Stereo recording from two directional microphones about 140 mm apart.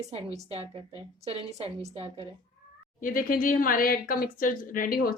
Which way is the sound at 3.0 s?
80° left.